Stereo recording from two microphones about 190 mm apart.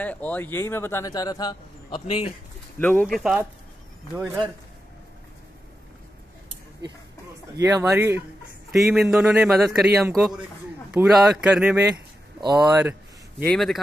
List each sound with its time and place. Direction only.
0.0 s speech: 10° left (ahead or behind); by 2.3 s 30° left (ahead or behind)
2.8 s a man's voice: 10° left (ahead or behind)
7.5 s speech: 15° right (ahead or behind)
8.7 s a man's voice: centre (ahead or behind)